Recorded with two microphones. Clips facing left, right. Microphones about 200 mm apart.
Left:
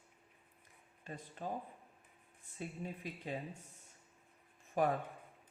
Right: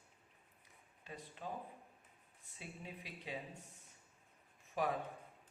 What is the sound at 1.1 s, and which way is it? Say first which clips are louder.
Speech: left 3 dB; 50° left (ahead or behind).